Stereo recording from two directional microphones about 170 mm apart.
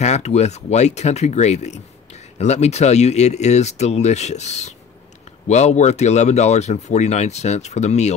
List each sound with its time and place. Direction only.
0.0 s speech: 40° left (ahead or behind)